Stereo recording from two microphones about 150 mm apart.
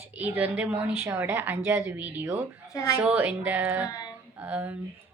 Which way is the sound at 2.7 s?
20° left (ahead or behind).